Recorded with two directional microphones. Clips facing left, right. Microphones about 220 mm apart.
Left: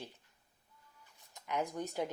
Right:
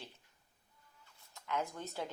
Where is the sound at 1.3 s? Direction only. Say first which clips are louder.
Left 2 dB; 15° left (ahead or behind).